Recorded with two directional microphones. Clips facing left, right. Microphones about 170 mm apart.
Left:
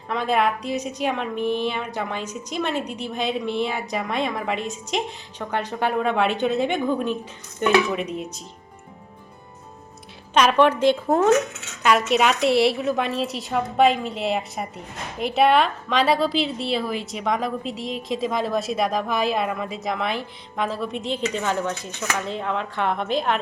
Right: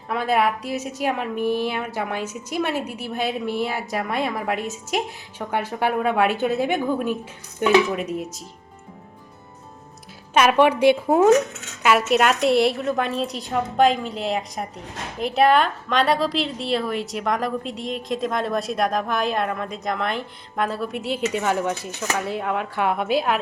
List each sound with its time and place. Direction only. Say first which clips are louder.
0.1 s a woman's voice: right 1 dB; 5° right (ahead or behind)
10.3 s a woman's voice: right 1 dB; 10° right (ahead or behind)